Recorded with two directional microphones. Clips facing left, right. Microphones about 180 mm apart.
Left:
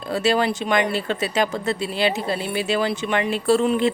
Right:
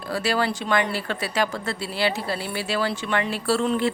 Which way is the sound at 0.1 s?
20° left (ahead or behind).